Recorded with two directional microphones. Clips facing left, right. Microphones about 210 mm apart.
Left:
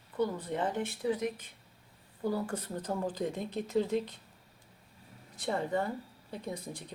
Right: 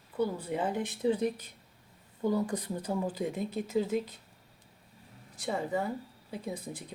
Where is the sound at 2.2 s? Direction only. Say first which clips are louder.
Right 3 dB; 20° right (ahead or behind).